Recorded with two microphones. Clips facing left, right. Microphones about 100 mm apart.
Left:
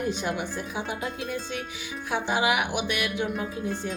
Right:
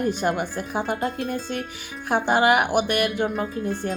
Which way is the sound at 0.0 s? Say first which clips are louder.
Right 5 dB; 50° right (ahead or behind).